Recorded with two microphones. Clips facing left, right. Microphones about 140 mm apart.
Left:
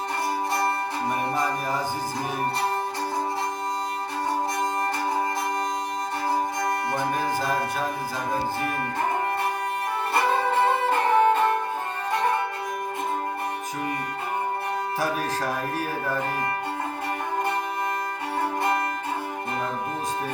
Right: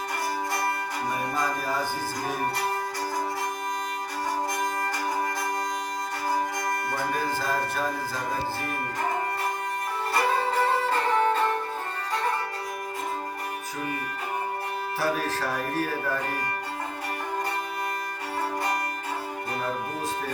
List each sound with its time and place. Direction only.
6.9 s music: 20° left (ahead or behind)
10.5 s music: 20° left (ahead or behind)
15.0 s music: 15° left (ahead or behind)